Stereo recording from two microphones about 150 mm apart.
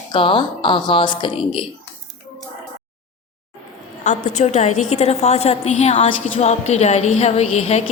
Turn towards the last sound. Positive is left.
turn(degrees=45)  # may be behind; listen again after turning